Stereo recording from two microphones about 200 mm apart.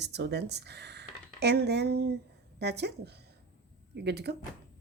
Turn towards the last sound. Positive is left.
turn(degrees=-55)  # may be behind; listen again after turning